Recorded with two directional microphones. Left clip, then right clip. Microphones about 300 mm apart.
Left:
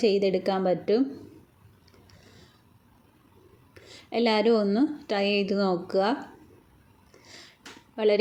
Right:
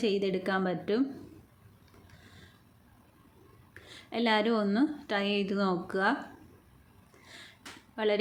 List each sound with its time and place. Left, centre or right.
0.0 s a woman's voice: centre
4.1 s a woman's voice: centre
7.9 s a woman's voice: centre